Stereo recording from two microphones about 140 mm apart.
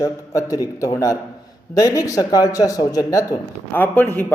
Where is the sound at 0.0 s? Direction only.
25° left (ahead or behind).